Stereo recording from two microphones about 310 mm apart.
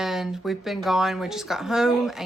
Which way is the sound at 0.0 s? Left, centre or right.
Centre.